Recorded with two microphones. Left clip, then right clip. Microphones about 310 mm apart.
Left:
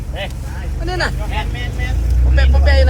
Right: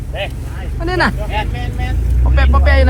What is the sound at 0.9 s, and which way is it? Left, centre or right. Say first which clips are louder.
Vehicle: right 5 dB; centre.